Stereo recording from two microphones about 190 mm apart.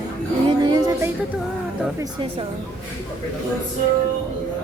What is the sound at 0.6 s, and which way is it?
Music, 20° right (ahead or behind).